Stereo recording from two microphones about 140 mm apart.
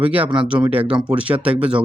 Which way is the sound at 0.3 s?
10° right (ahead or behind).